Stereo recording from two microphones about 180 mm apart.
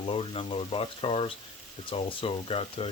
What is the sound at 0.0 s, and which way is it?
Speech, 30° left (ahead or behind).